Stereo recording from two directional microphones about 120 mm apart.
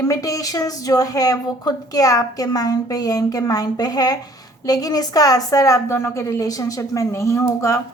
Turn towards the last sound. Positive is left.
turn(degrees=25)  # may be behind; listen again after turning